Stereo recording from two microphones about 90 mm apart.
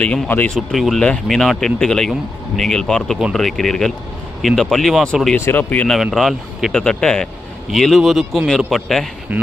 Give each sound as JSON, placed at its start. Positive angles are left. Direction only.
{"t": 0.0, "sound": "speech", "side_deg": 10}
{"t": 0.5, "sound": "a man's voice", "side_deg": 0}
{"t": 5.4, "sound": "speech", "side_deg": 20}
{"t": 5.9, "sound": "a man's voice", "side_deg": 0}
{"t": 9.3, "sound": "speech", "side_deg": -20}